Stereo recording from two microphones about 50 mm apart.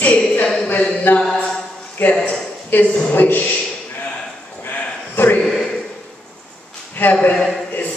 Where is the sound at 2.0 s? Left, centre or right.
Left.